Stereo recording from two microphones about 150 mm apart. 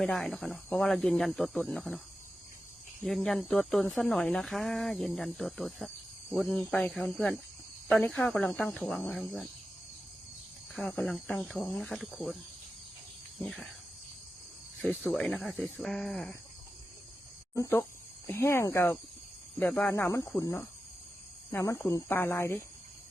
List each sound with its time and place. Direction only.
0.0 s speech: centre (ahead or behind)
3.0 s speech: centre (ahead or behind)
10.8 s speech: 5° left (ahead or behind)
13.4 s speech: centre (ahead or behind)
15.0 s speech: centre (ahead or behind)
17.5 s speech: 20° left (ahead or behind)